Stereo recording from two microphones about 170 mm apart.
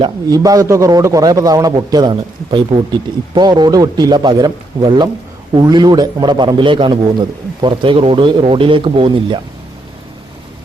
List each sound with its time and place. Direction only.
0.0 s a man's voice: 20° right (ahead or behind)